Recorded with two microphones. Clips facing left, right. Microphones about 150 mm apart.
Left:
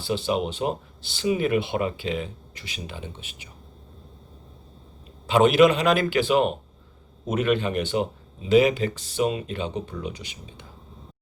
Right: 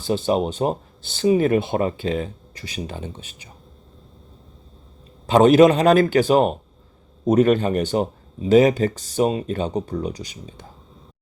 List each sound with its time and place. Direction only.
0.0 s speech: 45° right (ahead or behind)
5.2 s speech: 40° right (ahead or behind)